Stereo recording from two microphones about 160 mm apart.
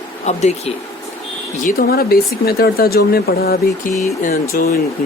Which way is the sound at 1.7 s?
70° left (ahead or behind).